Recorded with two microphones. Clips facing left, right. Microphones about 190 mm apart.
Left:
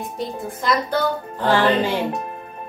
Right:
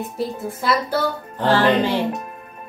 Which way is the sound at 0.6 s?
5° right (ahead or behind).